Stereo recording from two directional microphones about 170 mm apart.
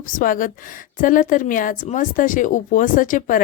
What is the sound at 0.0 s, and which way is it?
A woman's voice, 55° left (ahead or behind).